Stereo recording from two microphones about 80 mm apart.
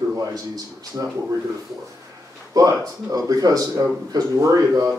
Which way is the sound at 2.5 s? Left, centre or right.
Right.